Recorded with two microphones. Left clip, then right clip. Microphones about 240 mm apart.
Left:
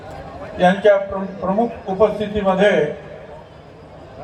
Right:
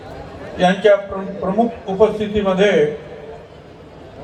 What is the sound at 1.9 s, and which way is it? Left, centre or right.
Speech, right.